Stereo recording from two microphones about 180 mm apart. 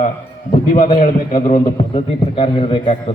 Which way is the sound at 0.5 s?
30° left (ahead or behind).